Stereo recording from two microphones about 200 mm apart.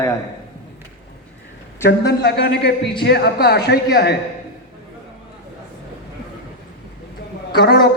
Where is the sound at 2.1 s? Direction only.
55° left (ahead or behind).